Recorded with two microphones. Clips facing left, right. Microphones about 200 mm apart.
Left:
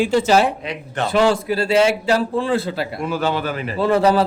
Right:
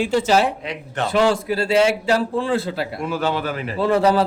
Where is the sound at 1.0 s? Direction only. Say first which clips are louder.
Left 1 dB; 35° left (ahead or behind).